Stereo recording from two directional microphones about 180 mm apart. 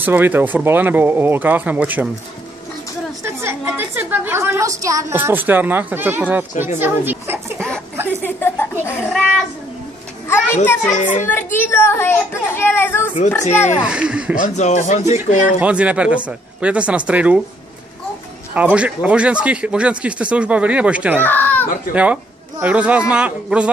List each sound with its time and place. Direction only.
0.0 s a woman's voice: 10° right (ahead or behind)
3.3 s a woman's voice: 15° right (ahead or behind)
8.2 s a sound: 10° left (ahead or behind)
10.2 s children playing: 10° left (ahead or behind)
11.0 s speech: 45° left (ahead or behind)
11.2 s speech: 10° left (ahead or behind)
13.8 s speech: 5° right (ahead or behind)
14.4 s speech: 40° left (ahead or behind)
15.6 s a woman's voice: 5° right (ahead or behind)
18.5 s a woman's voice: 10° right (ahead or behind)
21.2 s speech: 10° left (ahead or behind)
21.9 s a woman's voice: 5° right (ahead or behind)